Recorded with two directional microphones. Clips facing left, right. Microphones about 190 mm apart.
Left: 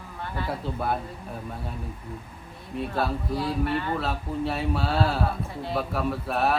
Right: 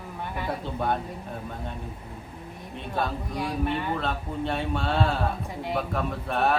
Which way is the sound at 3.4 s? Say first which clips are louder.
Even; 15° right (ahead or behind).